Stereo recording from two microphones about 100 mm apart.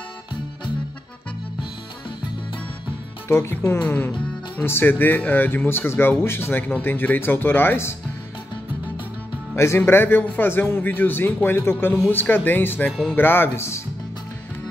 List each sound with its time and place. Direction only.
3.3 s speech: 25° left (ahead or behind)
3.8 s speech: 15° left (ahead or behind)
9.6 s speech: 25° left (ahead or behind)